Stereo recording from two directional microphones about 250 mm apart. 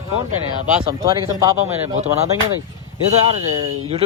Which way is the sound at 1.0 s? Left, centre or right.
Centre.